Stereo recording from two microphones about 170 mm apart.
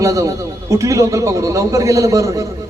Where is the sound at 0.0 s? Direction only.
20° right (ahead or behind).